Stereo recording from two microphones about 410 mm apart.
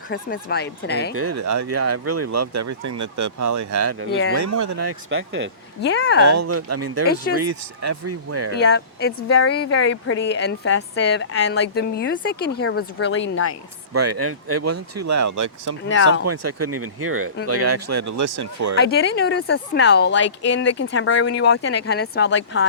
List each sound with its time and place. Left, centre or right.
0.1 s speech: left
1.1 s speech: right
4.9 s speech: right
5.8 s speech: left
6.2 s speech: right
8.5 s speech: left
13.9 s speech: right
15.9 s speech: left
16.2 s speech: right
18.8 s speech: left